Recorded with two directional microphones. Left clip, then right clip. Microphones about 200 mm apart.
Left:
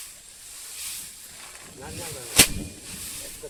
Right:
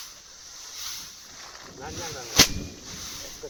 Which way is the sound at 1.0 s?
25° left (ahead or behind).